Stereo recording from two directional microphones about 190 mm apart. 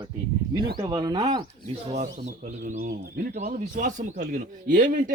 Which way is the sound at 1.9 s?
40° right (ahead or behind).